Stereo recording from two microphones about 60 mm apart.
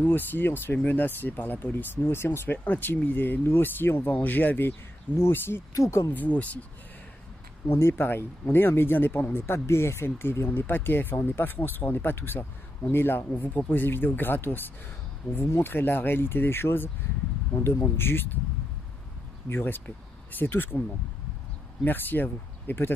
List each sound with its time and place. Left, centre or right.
0.0 s speech: left
5.8 s speech: left
6.0 s speech: left
7.6 s speech: left
19.5 s speech: left
21.8 s speech: left